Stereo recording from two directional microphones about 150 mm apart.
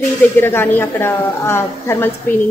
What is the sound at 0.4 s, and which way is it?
A woman's voice, 15° left (ahead or behind).